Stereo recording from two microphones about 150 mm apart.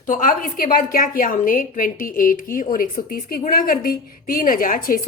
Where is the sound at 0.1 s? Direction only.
65° left (ahead or behind).